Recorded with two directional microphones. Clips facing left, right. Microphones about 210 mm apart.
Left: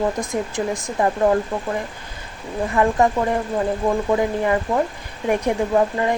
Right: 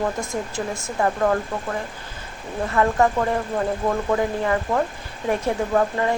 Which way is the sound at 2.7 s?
20° left (ahead or behind).